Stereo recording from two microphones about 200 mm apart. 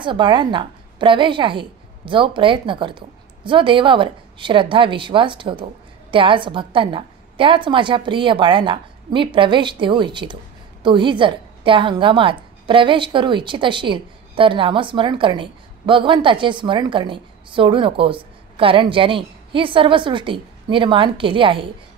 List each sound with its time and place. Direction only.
0.0 s a woman's voice: 25° right (ahead or behind)